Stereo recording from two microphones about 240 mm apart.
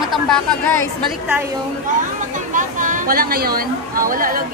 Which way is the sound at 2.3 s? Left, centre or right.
Right.